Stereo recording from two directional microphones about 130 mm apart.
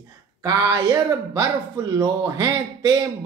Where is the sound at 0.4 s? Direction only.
25° right (ahead or behind).